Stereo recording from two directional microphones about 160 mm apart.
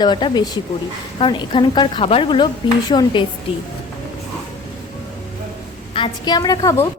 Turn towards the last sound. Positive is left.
turn(degrees=20)  # may be behind; listen again after turning